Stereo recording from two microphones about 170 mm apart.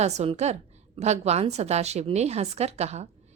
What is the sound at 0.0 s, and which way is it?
A woman's voice, 40° right (ahead or behind).